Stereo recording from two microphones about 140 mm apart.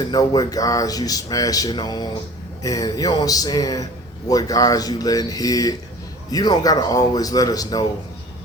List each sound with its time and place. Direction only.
0.1 s speech: 25° left (ahead or behind)